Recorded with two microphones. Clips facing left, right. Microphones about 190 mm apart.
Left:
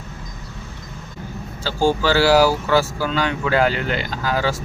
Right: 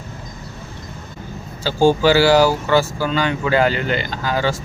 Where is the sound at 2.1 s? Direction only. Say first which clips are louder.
Right 1 dB; centre (ahead or behind).